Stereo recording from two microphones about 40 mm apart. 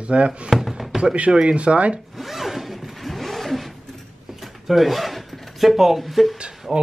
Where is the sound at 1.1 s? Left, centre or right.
Right.